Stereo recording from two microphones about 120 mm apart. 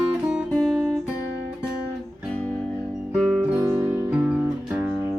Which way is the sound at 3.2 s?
5° right (ahead or behind).